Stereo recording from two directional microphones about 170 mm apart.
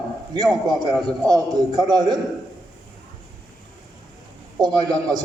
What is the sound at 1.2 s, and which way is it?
Speech, 20° right (ahead or behind).